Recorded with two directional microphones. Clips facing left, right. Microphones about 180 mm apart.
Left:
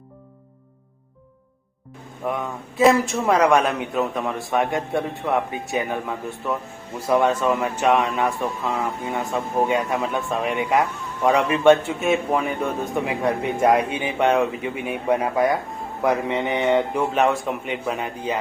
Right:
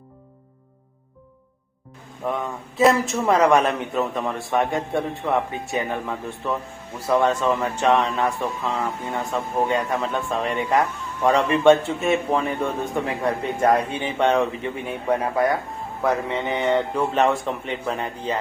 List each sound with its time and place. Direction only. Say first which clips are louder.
2.2 s speech: even; centre (ahead or behind)
12.9 s speech: left 1 dB; 15° left (ahead or behind)